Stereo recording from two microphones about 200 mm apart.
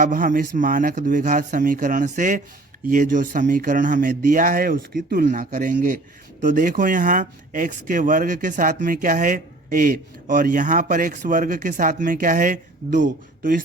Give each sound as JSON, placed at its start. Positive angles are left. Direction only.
{"t": 0.0, "sound": "speech", "side_deg": -40}